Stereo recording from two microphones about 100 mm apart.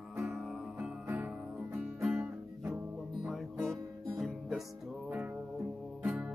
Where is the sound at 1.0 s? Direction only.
15° right (ahead or behind).